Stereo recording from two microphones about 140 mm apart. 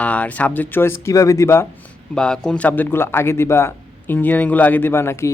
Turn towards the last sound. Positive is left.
turn(degrees=20)  # may be behind; listen again after turning